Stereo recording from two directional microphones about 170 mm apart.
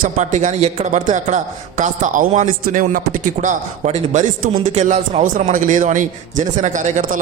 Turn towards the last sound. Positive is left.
turn(degrees=-45)  # may be behind; listen again after turning